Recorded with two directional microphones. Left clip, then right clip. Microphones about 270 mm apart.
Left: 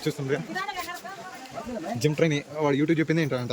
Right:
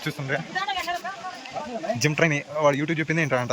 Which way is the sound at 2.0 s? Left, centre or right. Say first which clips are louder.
Right 1 dB; centre.